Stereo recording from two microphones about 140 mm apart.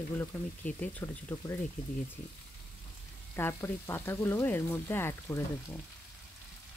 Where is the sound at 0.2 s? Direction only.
10° left (ahead or behind).